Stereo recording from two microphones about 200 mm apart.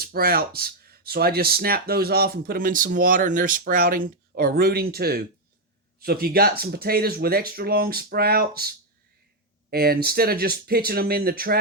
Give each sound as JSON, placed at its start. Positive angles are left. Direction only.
{"t": 0.0, "sound": "speech", "side_deg": -50}